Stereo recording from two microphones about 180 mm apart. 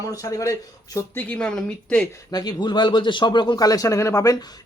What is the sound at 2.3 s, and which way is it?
A man's voice, 25° left (ahead or behind).